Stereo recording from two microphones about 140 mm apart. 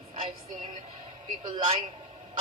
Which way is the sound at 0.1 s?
65° right (ahead or behind).